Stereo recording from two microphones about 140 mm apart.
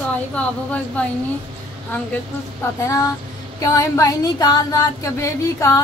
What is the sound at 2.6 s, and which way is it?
Female singing, 25° left (ahead or behind).